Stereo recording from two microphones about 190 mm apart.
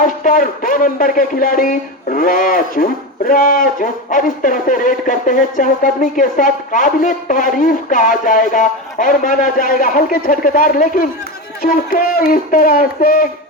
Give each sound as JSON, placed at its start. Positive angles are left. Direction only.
{"t": 0.0, "sound": "speech", "side_deg": 45}